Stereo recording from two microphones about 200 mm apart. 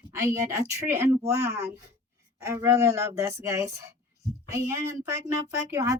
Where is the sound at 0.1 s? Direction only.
15° right (ahead or behind).